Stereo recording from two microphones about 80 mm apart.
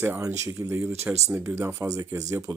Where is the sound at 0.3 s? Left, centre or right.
Right.